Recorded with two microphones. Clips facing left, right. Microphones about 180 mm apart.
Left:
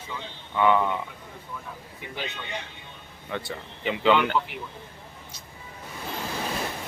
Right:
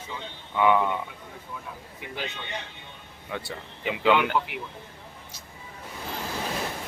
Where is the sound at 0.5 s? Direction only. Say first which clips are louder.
Even; 5° right (ahead or behind).